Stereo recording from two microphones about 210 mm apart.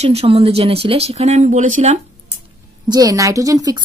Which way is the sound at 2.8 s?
15° right (ahead or behind).